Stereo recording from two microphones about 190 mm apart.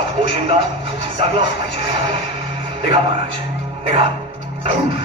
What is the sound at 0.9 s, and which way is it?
Speech, 65° left (ahead or behind).